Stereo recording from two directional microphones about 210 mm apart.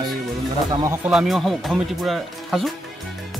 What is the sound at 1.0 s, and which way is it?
Speech, centre (ahead or behind).